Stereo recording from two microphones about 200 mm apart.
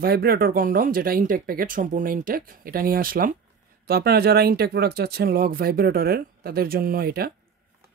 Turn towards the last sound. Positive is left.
turn(degrees=-50)  # may be behind; listen again after turning